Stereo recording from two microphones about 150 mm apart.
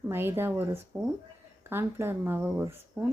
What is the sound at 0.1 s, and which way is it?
A woman's voice, 15° right (ahead or behind).